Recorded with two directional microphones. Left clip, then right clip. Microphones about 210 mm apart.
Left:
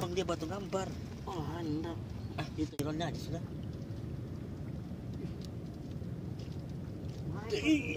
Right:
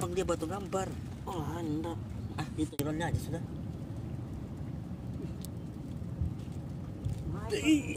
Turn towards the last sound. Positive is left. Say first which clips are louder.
# right 2 dB
turn(degrees=-15)  # may be behind; listen again after turning